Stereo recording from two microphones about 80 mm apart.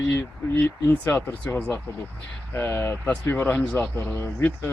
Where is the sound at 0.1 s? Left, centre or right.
Left.